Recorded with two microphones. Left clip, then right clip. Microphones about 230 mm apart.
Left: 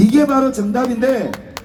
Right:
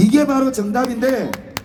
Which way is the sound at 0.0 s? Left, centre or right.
Right.